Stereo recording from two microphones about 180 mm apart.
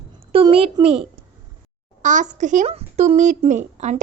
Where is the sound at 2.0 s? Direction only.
45° right (ahead or behind).